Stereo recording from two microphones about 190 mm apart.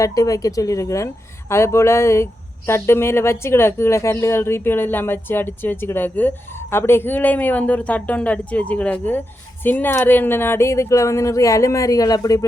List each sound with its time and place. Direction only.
0.0 s speech: 15° left (ahead or behind)